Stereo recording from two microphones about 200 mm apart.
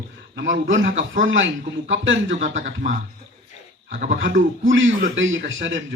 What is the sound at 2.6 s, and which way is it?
A man's voice, 40° right (ahead or behind).